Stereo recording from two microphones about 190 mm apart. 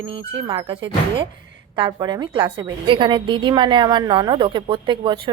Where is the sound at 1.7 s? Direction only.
25° right (ahead or behind).